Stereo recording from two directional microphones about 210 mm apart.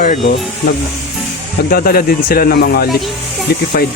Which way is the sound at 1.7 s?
45° left (ahead or behind).